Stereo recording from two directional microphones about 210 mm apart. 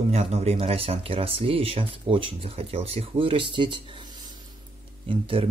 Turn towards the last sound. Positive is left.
turn(degrees=-25)  # may be behind; listen again after turning